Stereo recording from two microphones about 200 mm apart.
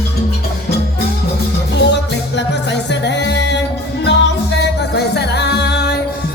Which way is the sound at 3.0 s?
60° left (ahead or behind).